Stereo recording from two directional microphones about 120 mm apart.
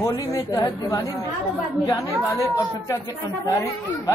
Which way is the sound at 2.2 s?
25° left (ahead or behind).